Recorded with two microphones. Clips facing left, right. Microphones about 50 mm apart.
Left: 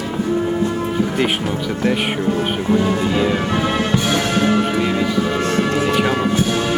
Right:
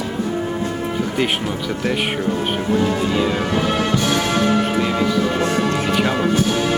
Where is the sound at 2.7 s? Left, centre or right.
Centre.